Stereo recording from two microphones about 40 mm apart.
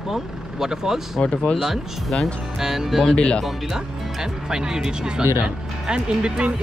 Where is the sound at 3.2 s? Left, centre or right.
Left.